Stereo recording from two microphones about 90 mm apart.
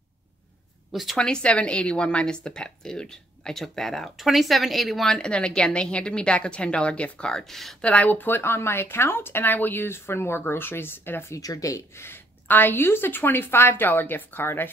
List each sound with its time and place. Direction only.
1.1 s speech: 10° left (ahead or behind)
7.8 s speech: 15° left (ahead or behind)
11.3 s speech: 40° left (ahead or behind); by 14.7 s 25° left (ahead or behind)